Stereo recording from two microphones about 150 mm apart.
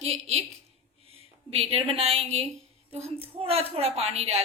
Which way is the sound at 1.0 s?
40° right (ahead or behind).